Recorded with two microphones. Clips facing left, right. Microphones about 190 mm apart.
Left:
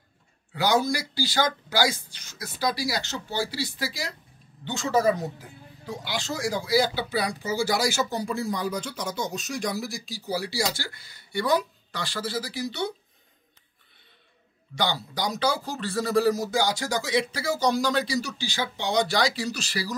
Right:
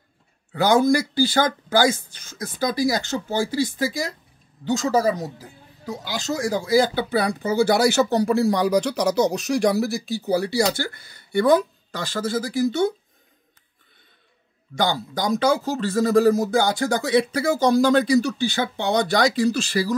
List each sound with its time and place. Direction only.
0.5 s speech: 50° right (ahead or behind)
14.8 s speech: 50° right (ahead or behind)